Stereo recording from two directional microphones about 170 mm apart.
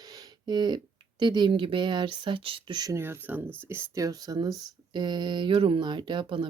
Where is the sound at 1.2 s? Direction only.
25° right (ahead or behind).